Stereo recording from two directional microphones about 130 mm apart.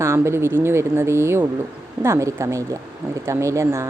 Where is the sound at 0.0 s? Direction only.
20° right (ahead or behind).